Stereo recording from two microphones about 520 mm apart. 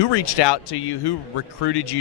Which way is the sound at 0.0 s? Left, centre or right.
Left.